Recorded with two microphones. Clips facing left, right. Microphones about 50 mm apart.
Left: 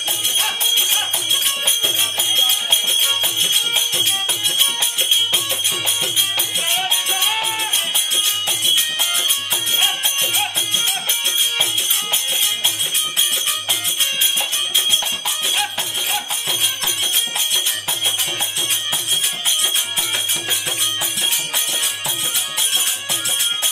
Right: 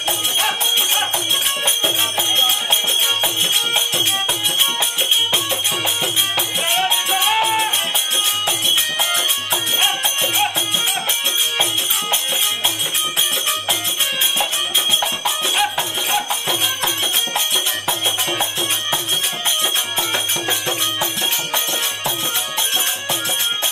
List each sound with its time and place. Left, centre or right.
2.1 s music: centre
6.7 s music: centre
9.1 s music: centre
15.2 s music: centre
20.4 s music: centre